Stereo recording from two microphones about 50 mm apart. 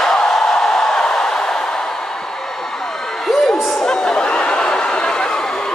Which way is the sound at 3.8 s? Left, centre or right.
Centre.